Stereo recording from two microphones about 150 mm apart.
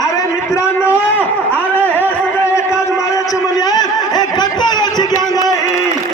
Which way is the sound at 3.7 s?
25° left (ahead or behind).